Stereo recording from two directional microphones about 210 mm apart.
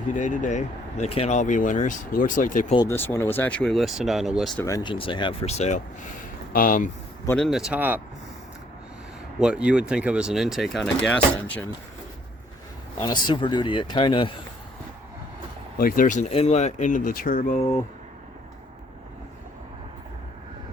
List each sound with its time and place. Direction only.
0.2 s speech: 35° left (ahead or behind)
2.7 s speech: 10° left (ahead or behind)
4.6 s speech: 20° left (ahead or behind); by 6.9 s 40° left (ahead or behind)
7.3 s speech: centre (ahead or behind)
9.4 s speech: 5° right (ahead or behind)
13.0 s speech: 20° left (ahead or behind)
15.8 s speech: 40° left (ahead or behind)